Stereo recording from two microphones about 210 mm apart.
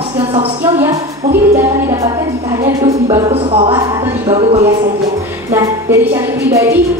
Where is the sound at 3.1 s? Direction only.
25° right (ahead or behind).